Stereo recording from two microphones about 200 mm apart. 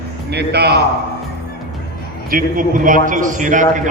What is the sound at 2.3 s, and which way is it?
A man's voice, 45° right (ahead or behind).